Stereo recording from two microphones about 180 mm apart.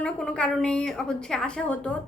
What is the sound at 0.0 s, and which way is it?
A woman's voice, 5° left (ahead or behind).